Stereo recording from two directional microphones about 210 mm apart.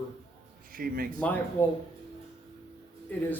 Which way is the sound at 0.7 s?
45° right (ahead or behind).